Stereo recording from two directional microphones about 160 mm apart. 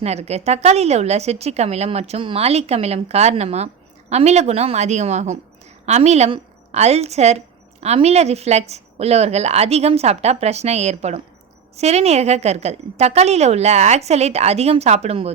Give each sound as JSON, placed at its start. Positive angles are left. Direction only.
{"t": 0.0, "sound": "a woman's voice", "side_deg": -40}